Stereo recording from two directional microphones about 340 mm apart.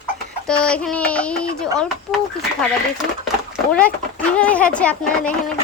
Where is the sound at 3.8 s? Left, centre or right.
Centre.